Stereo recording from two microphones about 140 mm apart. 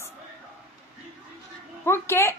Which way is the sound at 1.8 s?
15° left (ahead or behind).